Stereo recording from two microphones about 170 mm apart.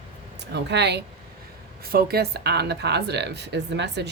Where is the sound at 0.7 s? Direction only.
85° right.